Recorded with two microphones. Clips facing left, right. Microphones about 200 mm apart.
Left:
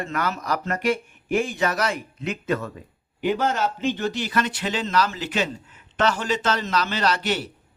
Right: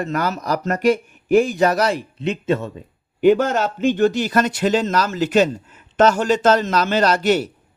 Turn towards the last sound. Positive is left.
turn(degrees=-45)  # may be behind; listen again after turning